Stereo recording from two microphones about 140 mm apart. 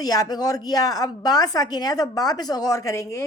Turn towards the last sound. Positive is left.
turn(degrees=25)  # may be behind; listen again after turning